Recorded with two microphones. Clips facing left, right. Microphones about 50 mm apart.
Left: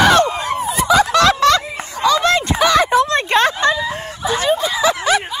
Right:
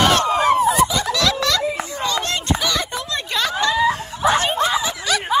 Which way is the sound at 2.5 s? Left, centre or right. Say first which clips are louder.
Left 10 dB; left.